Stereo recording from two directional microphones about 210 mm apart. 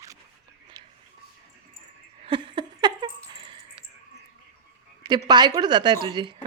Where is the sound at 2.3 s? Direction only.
25° right (ahead or behind).